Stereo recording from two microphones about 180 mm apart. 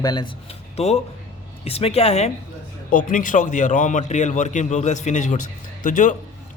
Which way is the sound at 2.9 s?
45° left (ahead or behind).